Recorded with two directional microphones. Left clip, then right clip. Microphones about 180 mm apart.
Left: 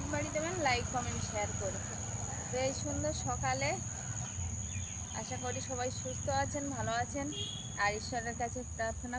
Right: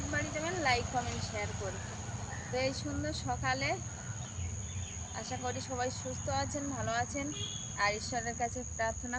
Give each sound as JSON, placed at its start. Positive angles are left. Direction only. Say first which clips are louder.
{"t": 0.1, "sound": "a sound", "louder": "even", "side_deg": -10}
{"t": 2.6, "sound": "speech", "louder": "even", "side_deg": -25}
{"t": 5.5, "sound": "speech", "louder": "right 2 dB", "side_deg": -5}